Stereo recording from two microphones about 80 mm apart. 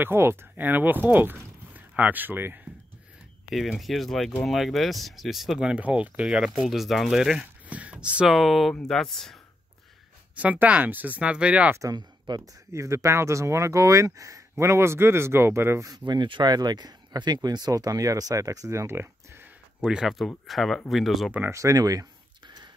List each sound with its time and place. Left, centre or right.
0.0 s speech: right
3.4 s speech: centre
6.2 s speech: centre
7.6 s a sound: centre
8.3 s speech: centre
10.3 s speech: centre
11.9 s speech: right
12.7 s speech: right
16.1 s speech: right
19.8 s speech: centre
21.5 s speech: right